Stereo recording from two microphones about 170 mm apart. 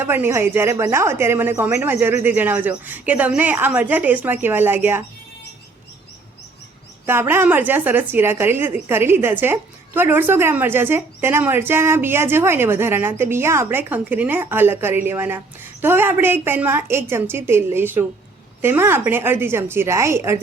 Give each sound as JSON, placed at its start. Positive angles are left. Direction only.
{"t": 0.0, "sound": "speech", "side_deg": -15}
{"t": 7.0, "sound": "speech", "side_deg": -15}